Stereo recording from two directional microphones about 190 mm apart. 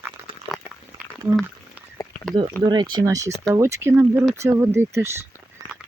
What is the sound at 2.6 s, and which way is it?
Speech, 25° right (ahead or behind).